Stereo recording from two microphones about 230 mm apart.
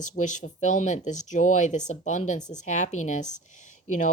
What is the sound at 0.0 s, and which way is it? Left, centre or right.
Speech, left.